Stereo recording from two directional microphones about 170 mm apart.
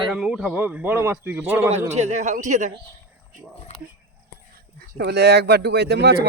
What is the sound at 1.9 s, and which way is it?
Speech, 45° right (ahead or behind).